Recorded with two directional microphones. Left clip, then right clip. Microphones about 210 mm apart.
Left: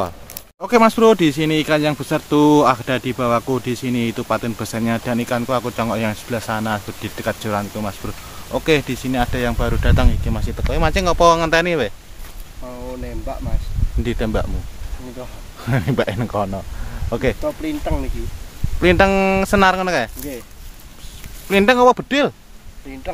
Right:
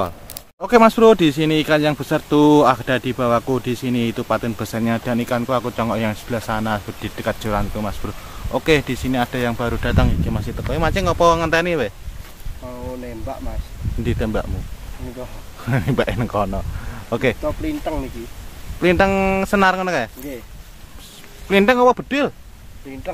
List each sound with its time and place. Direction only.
0.6 s speech: 5° right (ahead or behind); by 14.5 s 10° left (ahead or behind)
15.6 s speech: 10° left (ahead or behind)
17.6 s speech: 15° left (ahead or behind)
21.5 s speech: centre (ahead or behind)
21.7 s speech: 15° left (ahead or behind)